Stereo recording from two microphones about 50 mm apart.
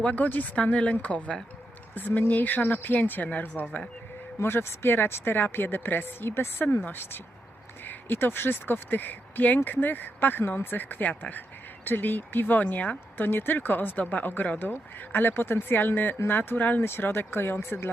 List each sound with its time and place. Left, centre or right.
0.0 s speech: left
2.0 s speech: left
4.4 s speech: left
13.1 s speech: left